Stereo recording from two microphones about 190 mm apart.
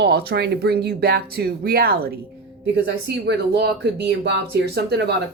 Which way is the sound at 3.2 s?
60° right (ahead or behind).